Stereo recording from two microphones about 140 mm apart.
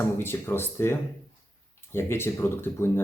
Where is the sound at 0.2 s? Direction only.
15° left (ahead or behind).